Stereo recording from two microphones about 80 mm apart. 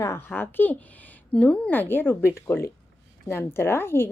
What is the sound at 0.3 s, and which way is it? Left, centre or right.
Speech, left.